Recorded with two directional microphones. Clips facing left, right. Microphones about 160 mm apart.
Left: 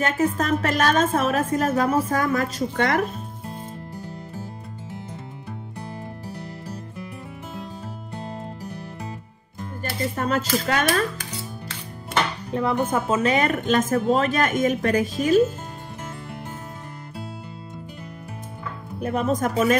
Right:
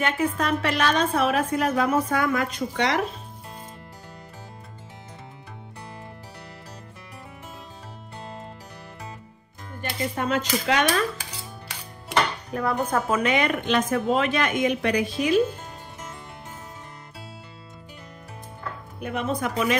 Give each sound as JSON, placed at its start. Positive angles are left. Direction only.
{"t": 0.0, "sound": "a woman's voice", "side_deg": 40}
{"t": 2.7, "sound": "speech", "side_deg": 50}
{"t": 9.8, "sound": "music", "side_deg": 40}
{"t": 12.5, "sound": "speech", "side_deg": 25}
{"t": 13.1, "sound": "speech", "side_deg": 35}
{"t": 18.9, "sound": "speech", "side_deg": 35}